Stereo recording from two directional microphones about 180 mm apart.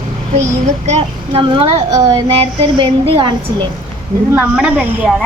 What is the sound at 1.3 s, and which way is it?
A woman's voice, 30° right (ahead or behind).